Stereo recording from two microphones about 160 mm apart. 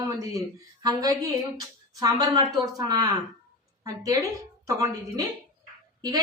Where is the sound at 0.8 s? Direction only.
25° right (ahead or behind).